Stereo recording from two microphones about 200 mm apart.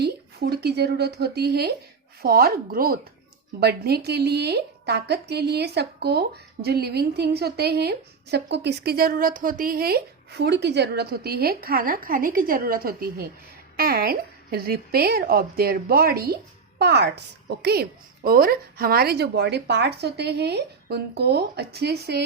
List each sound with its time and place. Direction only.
0.0 s a woman's voice: 55° right (ahead or behind)